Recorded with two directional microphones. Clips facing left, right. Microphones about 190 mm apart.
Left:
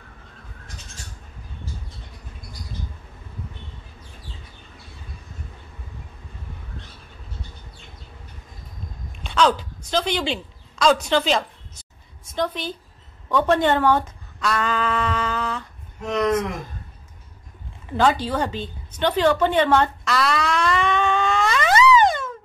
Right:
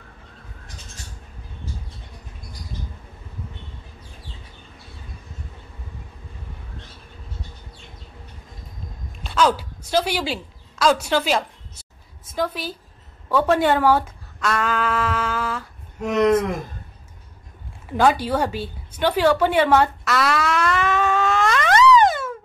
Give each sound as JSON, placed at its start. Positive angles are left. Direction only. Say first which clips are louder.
{"t": 9.2, "sound": "a sound", "louder": "even", "side_deg": -5}
{"t": 12.4, "sound": "a woman's voice", "louder": "even", "side_deg": -5}
{"t": 16.2, "sound": "speech", "louder": "right 4 dB", "side_deg": -25}
{"t": 17.9, "sound": "a woman's voice", "louder": "right 2 dB", "side_deg": -10}